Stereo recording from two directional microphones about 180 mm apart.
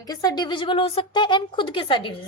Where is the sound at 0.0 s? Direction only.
20° left (ahead or behind).